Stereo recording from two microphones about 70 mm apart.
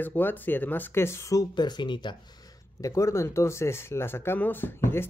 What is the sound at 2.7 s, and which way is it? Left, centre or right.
Speech, left.